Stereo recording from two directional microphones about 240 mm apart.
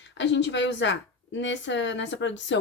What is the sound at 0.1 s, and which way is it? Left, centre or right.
Speech, left.